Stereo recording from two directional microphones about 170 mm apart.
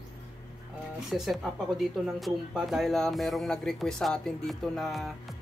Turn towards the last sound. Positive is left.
turn(degrees=0)  # may be behind; listen again after turning